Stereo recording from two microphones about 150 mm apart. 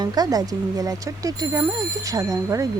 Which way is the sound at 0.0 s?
25° right (ahead or behind).